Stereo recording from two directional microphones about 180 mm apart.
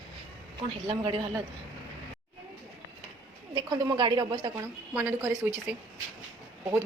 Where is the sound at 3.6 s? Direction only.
20° right (ahead or behind).